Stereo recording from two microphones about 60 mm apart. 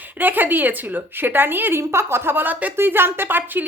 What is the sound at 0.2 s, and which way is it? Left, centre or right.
Speech, right.